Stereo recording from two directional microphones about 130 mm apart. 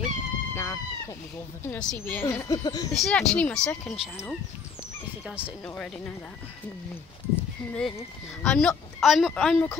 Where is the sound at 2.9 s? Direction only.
5° left (ahead or behind).